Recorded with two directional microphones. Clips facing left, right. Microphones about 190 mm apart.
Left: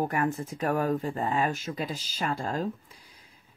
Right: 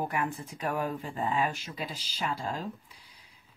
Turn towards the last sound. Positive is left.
turn(degrees=50)  # may be behind; listen again after turning